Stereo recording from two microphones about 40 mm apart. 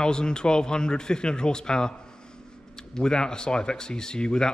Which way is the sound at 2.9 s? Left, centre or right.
Centre.